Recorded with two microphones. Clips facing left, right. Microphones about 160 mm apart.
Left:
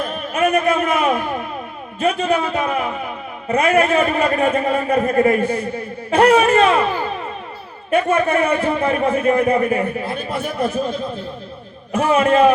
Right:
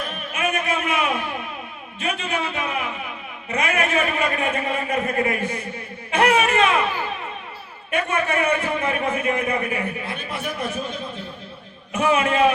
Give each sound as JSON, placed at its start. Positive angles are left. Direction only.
{"t": 0.0, "sound": "a sound", "side_deg": 35}
{"t": 2.0, "sound": "a man's voice", "side_deg": 40}
{"t": 11.9, "sound": "a man's voice", "side_deg": 40}